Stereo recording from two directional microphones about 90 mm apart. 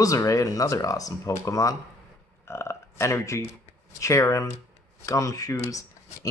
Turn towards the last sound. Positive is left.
turn(degrees=40)  # may be behind; listen again after turning